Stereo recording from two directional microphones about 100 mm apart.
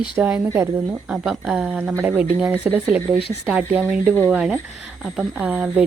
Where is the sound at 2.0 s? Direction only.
15° right (ahead or behind).